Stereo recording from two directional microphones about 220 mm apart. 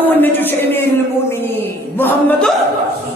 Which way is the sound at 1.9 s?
10° left (ahead or behind).